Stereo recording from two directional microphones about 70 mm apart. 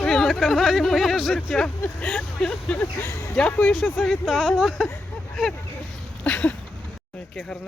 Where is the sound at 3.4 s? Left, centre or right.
Centre.